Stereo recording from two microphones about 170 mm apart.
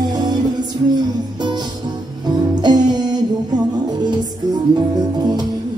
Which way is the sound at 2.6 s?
25° right (ahead or behind).